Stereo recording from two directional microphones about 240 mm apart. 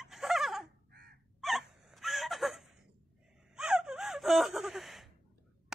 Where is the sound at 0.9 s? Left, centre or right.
Right.